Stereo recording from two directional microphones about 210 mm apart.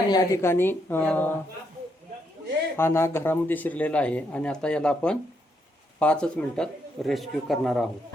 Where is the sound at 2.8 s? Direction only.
10° left (ahead or behind).